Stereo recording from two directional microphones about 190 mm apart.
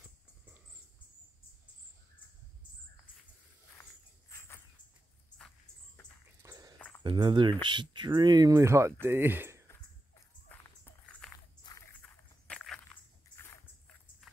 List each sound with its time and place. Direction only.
4.3 s dog: 15° left (ahead or behind)
6.4 s walk: 20° right (ahead or behind)
7.0 s speech: 25° right (ahead or behind)
10.5 s music: 10° left (ahead or behind)
12.0 s walk: 5° left (ahead or behind)